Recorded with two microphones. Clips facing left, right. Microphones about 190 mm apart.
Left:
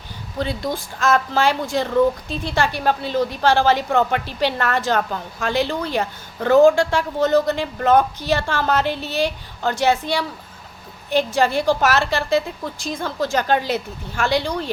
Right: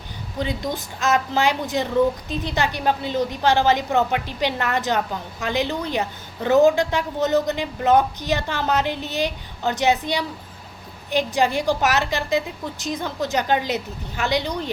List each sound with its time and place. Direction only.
0.3 s a woman's voice: 15° right (ahead or behind)